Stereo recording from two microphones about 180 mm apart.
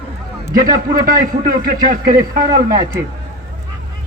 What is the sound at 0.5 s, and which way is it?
A man's voice, 50° right (ahead or behind).